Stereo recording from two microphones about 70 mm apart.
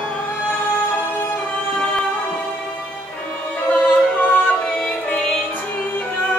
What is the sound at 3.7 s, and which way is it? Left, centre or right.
Music, left.